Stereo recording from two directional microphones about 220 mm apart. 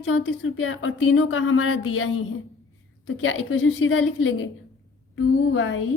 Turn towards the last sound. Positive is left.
turn(degrees=65)  # may be behind; listen again after turning